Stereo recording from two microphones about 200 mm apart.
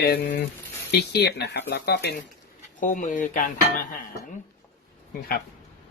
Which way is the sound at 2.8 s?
40° left (ahead or behind).